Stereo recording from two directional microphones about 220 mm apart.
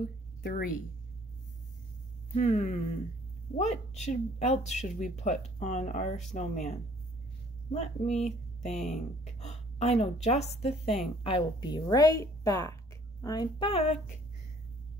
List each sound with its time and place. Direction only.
0.4 s a woman's voice: 45° left (ahead or behind)
2.3 s speech: 30° left (ahead or behind)
7.7 s a woman's voice: 30° left (ahead or behind)